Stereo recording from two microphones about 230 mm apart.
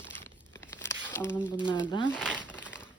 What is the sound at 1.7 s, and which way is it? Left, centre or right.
Speech, centre.